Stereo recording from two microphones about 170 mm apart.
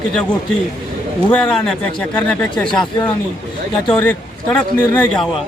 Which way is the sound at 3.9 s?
10° left (ahead or behind).